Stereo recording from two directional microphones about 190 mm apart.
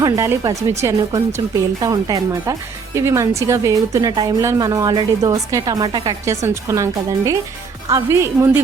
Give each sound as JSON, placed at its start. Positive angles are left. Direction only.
{"t": 0.0, "sound": "speech", "side_deg": -15}